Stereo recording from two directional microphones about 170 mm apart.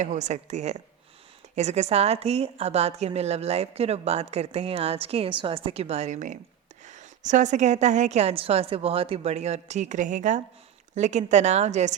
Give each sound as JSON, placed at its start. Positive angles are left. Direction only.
{"t": 0.0, "sound": "a woman's voice", "side_deg": -45}